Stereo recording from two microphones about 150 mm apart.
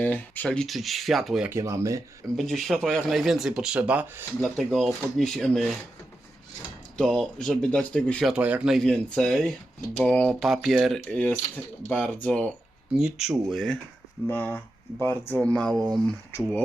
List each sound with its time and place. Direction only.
0.0 s speech: 10° left (ahead or behind)
1.5 s speech: 20° right (ahead or behind)
2.3 s speech: centre (ahead or behind)
4.4 s speech: centre (ahead or behind)
8.3 s speech: 10° right (ahead or behind); by 12.5 s 10° left (ahead or behind)
13.0 s speech: 5° right (ahead or behind)